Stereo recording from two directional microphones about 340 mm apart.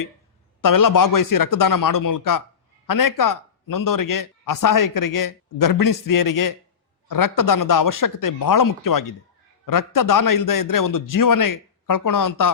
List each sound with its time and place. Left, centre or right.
0.6 s a man's voice: left